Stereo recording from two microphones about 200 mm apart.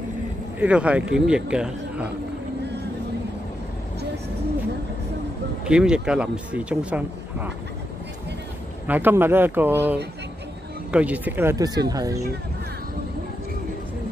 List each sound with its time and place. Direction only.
0.6 s speech: 5° right (ahead or behind)
5.7 s speech: 5° right (ahead or behind)
8.8 s speech: 10° right (ahead or behind)